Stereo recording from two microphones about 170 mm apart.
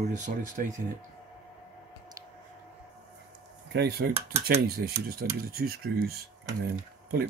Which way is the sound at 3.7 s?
75° right (ahead or behind).